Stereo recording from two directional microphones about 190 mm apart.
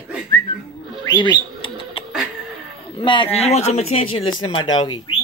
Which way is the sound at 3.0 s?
25° left (ahead or behind).